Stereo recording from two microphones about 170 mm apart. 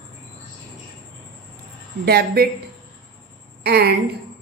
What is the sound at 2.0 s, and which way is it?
Speech, 65° right (ahead or behind).